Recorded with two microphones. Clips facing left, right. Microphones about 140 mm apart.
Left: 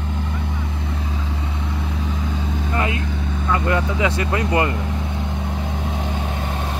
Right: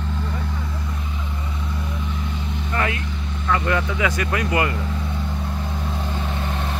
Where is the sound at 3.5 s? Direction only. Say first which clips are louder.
Left 1 dB; 25° left (ahead or behind).